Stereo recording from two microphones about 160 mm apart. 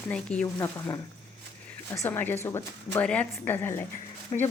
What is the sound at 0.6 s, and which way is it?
Speech, 20° left (ahead or behind).